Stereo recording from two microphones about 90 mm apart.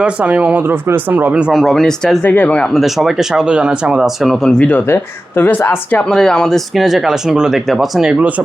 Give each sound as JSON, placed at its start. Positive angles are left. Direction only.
{"t": 0.0, "sound": "speech", "side_deg": -10}
{"t": 1.5, "sound": "speech", "side_deg": 0}
{"t": 2.2, "sound": "speech", "side_deg": 20}
{"t": 2.6, "sound": "speech", "side_deg": 0}
{"t": 4.9, "sound": "speech", "side_deg": 25}
{"t": 6.1, "sound": "speech", "side_deg": 5}